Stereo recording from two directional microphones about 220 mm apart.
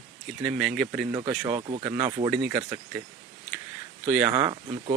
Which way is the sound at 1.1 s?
15° right (ahead or behind).